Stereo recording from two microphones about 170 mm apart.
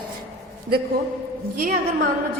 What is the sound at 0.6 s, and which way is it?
Speech, 65° right (ahead or behind).